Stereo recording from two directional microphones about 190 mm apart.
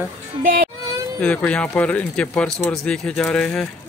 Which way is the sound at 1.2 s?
5° left (ahead or behind).